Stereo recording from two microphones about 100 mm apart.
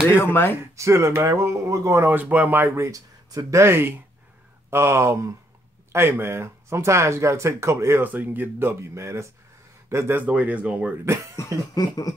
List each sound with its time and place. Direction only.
0.2 s speech: 25° left (ahead or behind)
0.7 s speech: 30° right (ahead or behind); by 10.9 s 15° right (ahead or behind)
11.7 s a sound: 40° left (ahead or behind)